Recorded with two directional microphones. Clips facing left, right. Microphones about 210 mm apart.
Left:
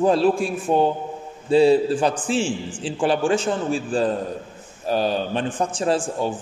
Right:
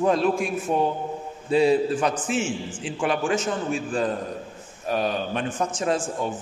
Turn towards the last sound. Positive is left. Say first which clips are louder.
# left 3 dB
turn(degrees=30)  # may be behind; listen again after turning